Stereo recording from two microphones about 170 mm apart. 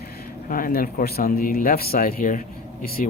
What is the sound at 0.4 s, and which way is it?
Speech, 55° left (ahead or behind).